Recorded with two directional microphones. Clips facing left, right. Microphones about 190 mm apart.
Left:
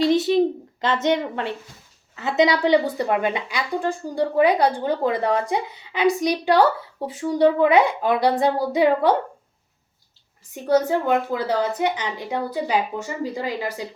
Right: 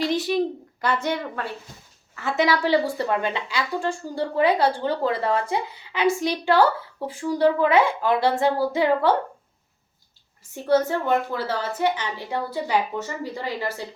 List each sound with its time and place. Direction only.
0.0 s a sound: 25° left (ahead or behind)
2.1 s a woman's voice: 20° left (ahead or behind)
10.5 s a woman's voice: 15° left (ahead or behind)